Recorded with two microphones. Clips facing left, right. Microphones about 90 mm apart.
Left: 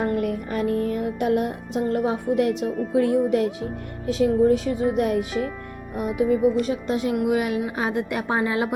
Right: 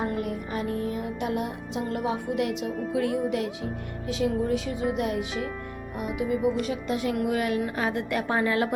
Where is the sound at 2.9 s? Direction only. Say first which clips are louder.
Left 7 dB; 35° left (ahead or behind); by 8.7 s 20° left (ahead or behind).